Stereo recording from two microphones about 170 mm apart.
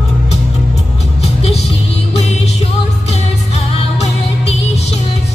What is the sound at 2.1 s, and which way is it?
Music, 40° left (ahead or behind).